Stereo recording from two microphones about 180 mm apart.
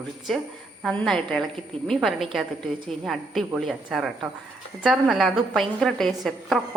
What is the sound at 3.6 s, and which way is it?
A woman's voice, centre (ahead or behind).